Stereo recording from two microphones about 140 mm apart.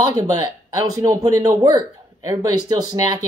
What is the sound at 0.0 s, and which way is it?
Speech, 25° right (ahead or behind).